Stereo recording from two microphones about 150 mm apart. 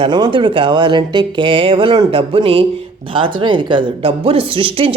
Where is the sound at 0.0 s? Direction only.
35° right (ahead or behind).